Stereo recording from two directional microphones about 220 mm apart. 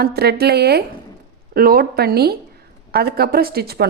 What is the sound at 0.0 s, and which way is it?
A woman's voice, 45° right (ahead or behind).